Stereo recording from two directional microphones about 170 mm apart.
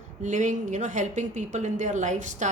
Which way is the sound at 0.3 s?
45° right (ahead or behind).